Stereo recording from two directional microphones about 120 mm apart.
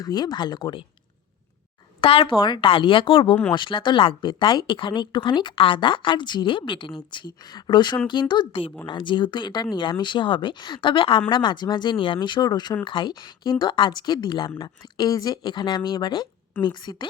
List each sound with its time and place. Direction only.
0.0 s speech: 35° left (ahead or behind)
2.0 s a woman's voice: 45° left (ahead or behind)